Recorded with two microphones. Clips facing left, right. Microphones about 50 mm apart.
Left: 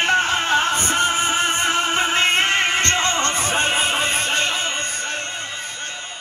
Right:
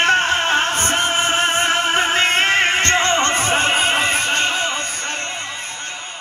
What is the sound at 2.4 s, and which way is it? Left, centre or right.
Music, right.